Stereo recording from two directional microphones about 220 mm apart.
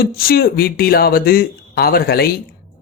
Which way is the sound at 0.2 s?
40° left (ahead or behind).